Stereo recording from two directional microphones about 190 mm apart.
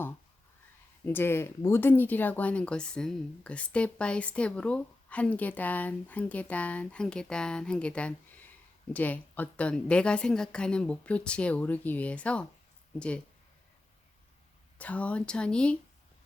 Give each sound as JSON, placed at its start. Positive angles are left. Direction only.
{"t": 1.0, "sound": "speech", "side_deg": 10}
{"t": 14.8, "sound": "speech", "side_deg": 5}